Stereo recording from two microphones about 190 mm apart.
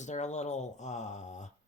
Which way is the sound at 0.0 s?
35° left (ahead or behind).